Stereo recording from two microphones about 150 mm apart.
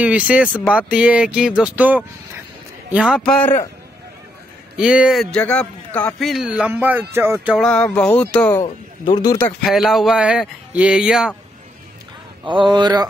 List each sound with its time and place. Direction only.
0.0 s a man's voice: 10° right (ahead or behind)
3.2 s a sound: 10° left (ahead or behind)
4.7 s a man's voice: 5° right (ahead or behind)
7.5 s a sound: 5° left (ahead or behind)
9.0 s speech: 25° left (ahead or behind)
9.6 s a man's voice: centre (ahead or behind)
12.4 s speech: 30° right (ahead or behind)